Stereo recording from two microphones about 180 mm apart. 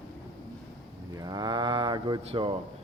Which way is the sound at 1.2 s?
20° right (ahead or behind).